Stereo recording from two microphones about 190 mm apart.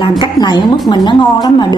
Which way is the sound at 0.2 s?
20° left (ahead or behind).